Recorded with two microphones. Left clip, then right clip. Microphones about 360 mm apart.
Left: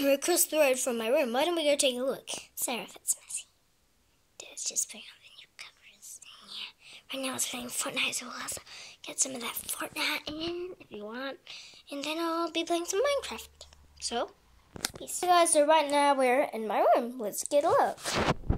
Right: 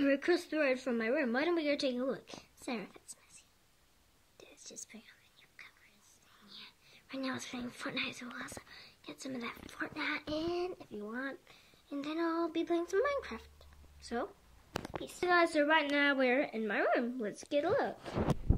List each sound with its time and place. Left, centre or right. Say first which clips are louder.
0.0 s speech: left 5 dB; centre
4.4 s whispering: left 15 dB; centre
6.2 s a woman's voice: left 11 dB; centre
18.0 s a sound: left 8 dB; left